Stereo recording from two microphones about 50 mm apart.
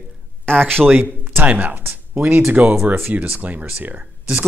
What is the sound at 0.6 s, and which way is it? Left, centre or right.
Speech, right.